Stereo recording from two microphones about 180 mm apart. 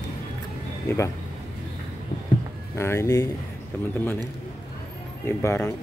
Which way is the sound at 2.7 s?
15° left (ahead or behind).